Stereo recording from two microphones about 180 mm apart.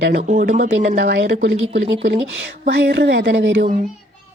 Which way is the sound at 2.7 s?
80° right.